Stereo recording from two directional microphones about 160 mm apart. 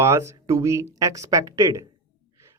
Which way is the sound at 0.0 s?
15° right (ahead or behind).